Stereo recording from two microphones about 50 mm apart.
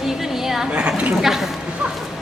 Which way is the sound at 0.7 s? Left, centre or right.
Right.